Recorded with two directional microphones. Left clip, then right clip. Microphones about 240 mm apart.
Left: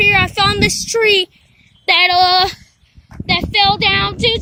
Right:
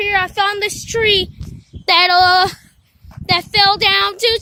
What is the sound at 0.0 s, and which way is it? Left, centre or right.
Child singing, centre.